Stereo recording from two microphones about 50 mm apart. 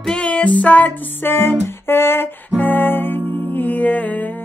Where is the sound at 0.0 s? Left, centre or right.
Centre.